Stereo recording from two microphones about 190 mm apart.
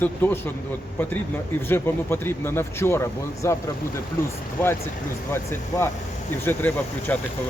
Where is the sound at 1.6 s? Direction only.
10° left (ahead or behind).